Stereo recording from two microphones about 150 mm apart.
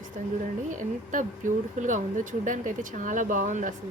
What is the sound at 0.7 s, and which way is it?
Speech, 60° right (ahead or behind).